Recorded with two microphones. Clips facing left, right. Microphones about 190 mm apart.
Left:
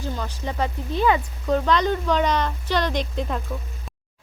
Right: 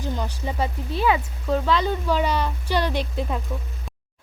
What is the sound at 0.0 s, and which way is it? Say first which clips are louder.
Speech: right 1 dB; 15° right (ahead or behind).